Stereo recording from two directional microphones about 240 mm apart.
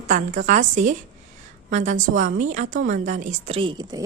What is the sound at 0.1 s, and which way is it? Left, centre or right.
A woman's voice, right.